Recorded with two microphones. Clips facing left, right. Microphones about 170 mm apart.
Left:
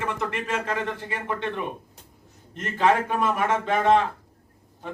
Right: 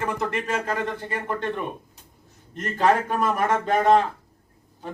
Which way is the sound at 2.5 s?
40° right (ahead or behind).